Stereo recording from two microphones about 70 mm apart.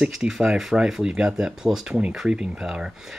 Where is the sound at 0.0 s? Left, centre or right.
Centre.